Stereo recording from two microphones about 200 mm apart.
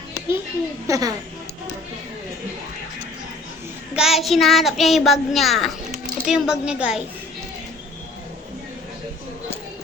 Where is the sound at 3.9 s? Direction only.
Centre (ahead or behind).